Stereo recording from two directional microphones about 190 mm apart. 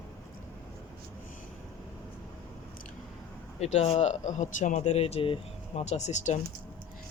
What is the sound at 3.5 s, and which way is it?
A man's voice, 35° left (ahead or behind).